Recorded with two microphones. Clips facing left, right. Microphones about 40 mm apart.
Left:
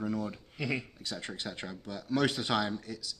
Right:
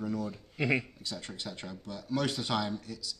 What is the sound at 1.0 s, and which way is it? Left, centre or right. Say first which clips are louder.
Speech: left 1 dB; centre.